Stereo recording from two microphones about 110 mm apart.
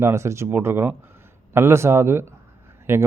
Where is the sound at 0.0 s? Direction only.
25° right (ahead or behind).